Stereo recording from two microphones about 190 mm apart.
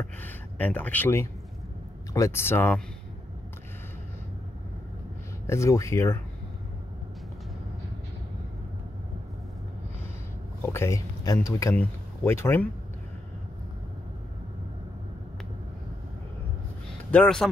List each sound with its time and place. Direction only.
0.0 s speech: 10° left (ahead or behind)
5.5 s speech: 15° left (ahead or behind)
10.6 s speech: 15° left (ahead or behind)
17.1 s speech: 5° left (ahead or behind)